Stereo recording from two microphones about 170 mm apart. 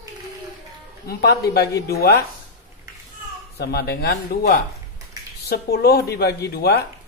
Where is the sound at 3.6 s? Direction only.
70° left (ahead or behind).